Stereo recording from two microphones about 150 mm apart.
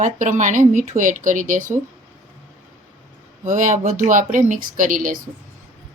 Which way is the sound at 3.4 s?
55° right (ahead or behind).